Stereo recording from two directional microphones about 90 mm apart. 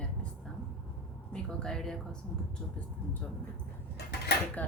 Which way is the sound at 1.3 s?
10° left (ahead or behind).